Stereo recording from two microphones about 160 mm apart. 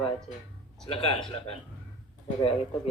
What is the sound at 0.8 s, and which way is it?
Speech, 35° left (ahead or behind).